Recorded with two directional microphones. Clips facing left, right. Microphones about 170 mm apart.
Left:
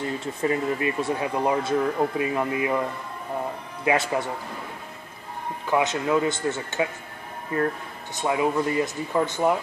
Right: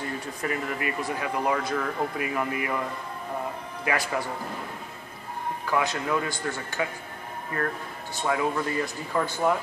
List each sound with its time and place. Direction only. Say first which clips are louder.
0.2 s speech: left 6 dB; 25° left (ahead or behind)
3.8 s speech: left 5 dB; 25° left (ahead or behind)
5.7 s speech: left 4 dB; 20° left (ahead or behind)